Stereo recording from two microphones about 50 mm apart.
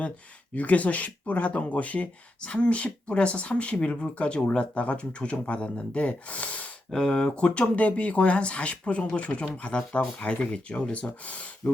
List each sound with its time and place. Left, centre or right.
0.5 s speech: left
6.9 s speech: centre